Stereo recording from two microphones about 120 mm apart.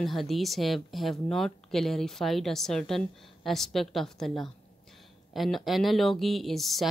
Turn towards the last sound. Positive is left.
turn(degrees=0)  # may be behind; listen again after turning